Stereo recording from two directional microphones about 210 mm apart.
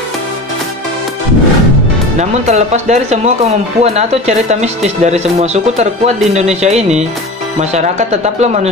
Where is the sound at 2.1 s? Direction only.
35° right (ahead or behind).